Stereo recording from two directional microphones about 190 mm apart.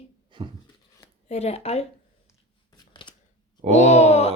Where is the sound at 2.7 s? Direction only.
25° left (ahead or behind).